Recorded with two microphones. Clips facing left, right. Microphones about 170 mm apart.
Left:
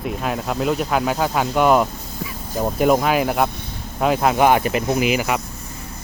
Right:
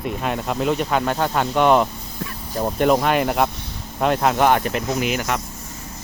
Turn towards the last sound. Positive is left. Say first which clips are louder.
# left 3 dB
turn(degrees=5)  # may be behind; listen again after turning